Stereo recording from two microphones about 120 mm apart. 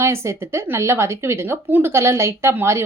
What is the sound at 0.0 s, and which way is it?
Speech, 25° right (ahead or behind).